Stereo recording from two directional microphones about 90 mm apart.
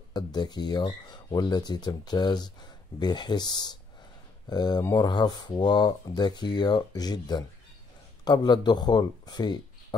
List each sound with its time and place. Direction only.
0.1 s speech: 50° left (ahead or behind)